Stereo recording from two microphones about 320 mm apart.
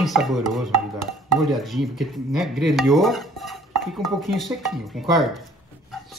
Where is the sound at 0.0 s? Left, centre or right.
Centre.